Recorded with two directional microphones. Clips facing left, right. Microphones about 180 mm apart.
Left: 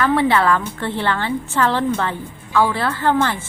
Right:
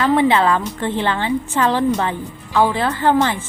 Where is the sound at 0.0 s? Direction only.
20° right (ahead or behind).